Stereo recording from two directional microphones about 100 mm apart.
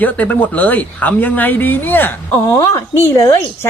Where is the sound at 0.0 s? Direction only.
15° left (ahead or behind).